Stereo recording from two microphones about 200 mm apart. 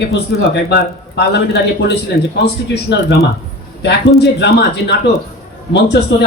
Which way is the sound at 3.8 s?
60° left (ahead or behind).